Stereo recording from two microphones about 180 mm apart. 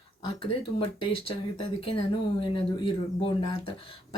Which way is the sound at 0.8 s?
30° left (ahead or behind).